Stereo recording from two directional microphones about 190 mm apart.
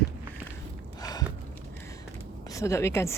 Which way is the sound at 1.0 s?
20° left (ahead or behind).